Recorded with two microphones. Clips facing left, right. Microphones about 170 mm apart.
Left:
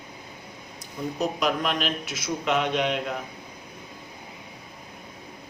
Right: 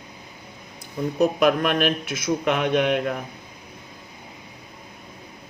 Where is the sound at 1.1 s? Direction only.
60° right (ahead or behind).